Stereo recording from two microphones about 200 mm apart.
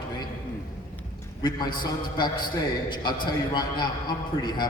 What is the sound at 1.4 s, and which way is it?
A man's voice, 20° left (ahead or behind).